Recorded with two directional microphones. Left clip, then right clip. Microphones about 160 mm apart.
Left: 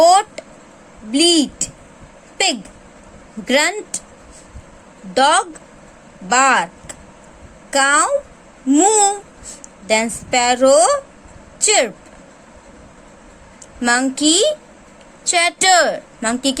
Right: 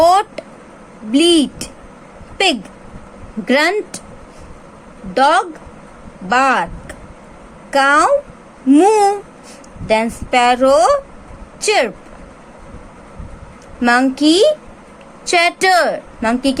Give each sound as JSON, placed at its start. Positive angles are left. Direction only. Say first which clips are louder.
{"t": 0.0, "sound": "a sound", "louder": "even", "side_deg": 30}
{"t": 1.1, "sound": "a woman's voice", "louder": "right 2 dB", "side_deg": 30}
{"t": 5.1, "sound": "a woman's voice", "louder": "right 1 dB", "side_deg": 40}
{"t": 13.8, "sound": "a woman's voice", "louder": "right 3 dB", "side_deg": 40}